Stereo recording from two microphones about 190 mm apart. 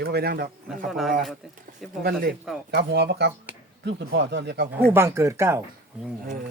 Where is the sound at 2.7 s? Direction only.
60° right (ahead or behind).